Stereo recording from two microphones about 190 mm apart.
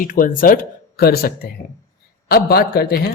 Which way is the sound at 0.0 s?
45° left (ahead or behind).